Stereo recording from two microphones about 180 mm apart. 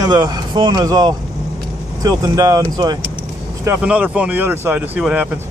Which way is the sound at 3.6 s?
10° right (ahead or behind).